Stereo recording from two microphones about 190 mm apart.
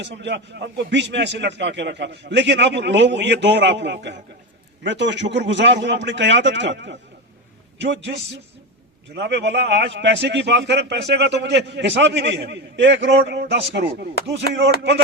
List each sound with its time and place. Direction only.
0.0 s a man's voice: 65° right (ahead or behind)
9.1 s a man's voice: 65° right (ahead or behind)